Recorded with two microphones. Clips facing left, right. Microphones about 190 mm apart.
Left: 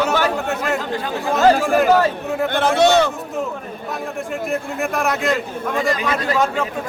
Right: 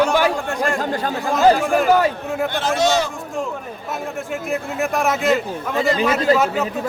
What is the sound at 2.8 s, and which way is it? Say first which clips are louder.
Speech: left 4 dB; 60° left (ahead or behind).